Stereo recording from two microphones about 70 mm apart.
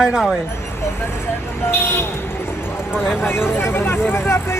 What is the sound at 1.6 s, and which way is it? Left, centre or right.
Buzzer, left.